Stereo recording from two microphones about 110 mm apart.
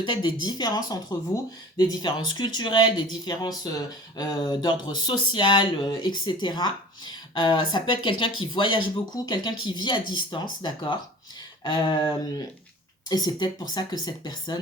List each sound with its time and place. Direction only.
0.0 s speech: 45° left (ahead or behind)